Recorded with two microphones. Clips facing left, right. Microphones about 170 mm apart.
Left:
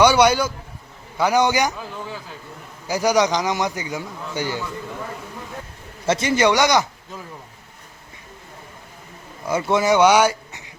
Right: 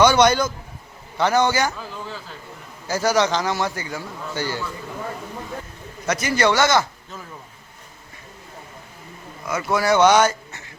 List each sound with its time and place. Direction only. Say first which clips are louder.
0.0 s a man's voice: even; 10° left (ahead or behind)
6.1 s a man's voice: left 2 dB; 25° left (ahead or behind)
9.5 s speech: left 2 dB; 25° left (ahead or behind)